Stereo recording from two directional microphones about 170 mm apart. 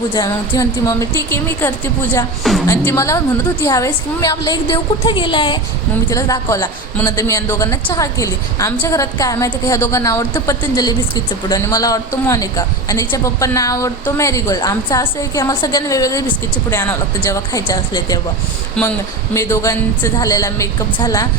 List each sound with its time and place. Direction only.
0.1 s speech: 20° left (ahead or behind)
2.4 s speech: centre (ahead or behind)
2.6 s a woman's voice: 15° left (ahead or behind)
18.8 s speech: 5° left (ahead or behind)
19.3 s a woman's voice: 15° left (ahead or behind)